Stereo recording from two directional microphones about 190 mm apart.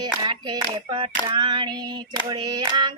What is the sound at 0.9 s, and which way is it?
Child singing, 25° right (ahead or behind).